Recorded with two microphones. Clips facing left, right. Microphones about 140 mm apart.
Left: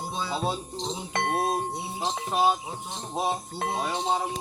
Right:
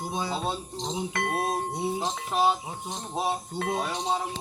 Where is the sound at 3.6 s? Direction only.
30° left (ahead or behind).